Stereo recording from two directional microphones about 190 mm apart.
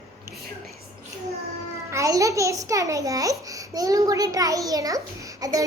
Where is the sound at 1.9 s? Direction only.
15° right (ahead or behind).